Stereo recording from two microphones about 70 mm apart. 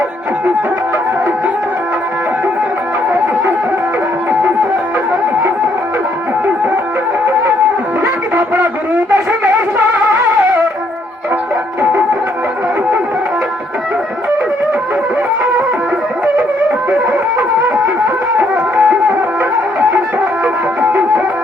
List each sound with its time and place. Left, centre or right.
9.0 s a sound: right
18.5 s music: centre
20.4 s music: centre